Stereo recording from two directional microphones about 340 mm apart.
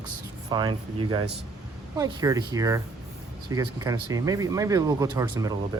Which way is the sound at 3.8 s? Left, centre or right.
Centre.